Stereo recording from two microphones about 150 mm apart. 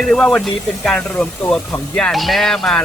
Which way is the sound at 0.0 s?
5° left (ahead or behind).